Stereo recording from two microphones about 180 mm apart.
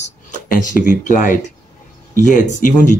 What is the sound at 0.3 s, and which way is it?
Speech, 45° left (ahead or behind).